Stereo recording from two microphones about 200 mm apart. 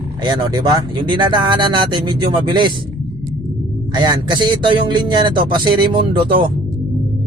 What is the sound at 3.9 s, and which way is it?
Speech, 20° right (ahead or behind).